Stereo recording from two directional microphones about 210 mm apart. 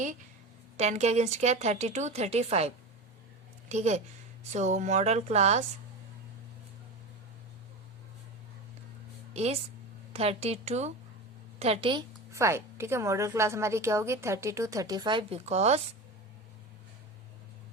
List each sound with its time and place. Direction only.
0.8 s a woman's voice: 30° right (ahead or behind)
9.3 s a woman's voice: 30° right (ahead or behind)